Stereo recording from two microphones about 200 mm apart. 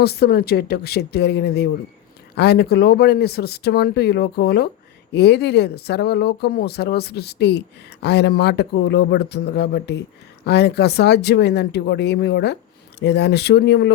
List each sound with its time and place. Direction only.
0.0 s speech: 55° left (ahead or behind)